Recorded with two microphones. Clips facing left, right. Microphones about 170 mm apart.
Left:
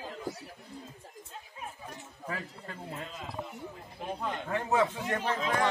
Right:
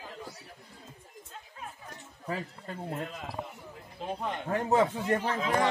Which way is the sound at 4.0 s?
20° right (ahead or behind).